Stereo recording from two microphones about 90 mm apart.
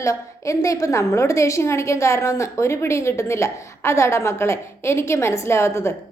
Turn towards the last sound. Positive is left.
turn(degrees=30)  # may be behind; listen again after turning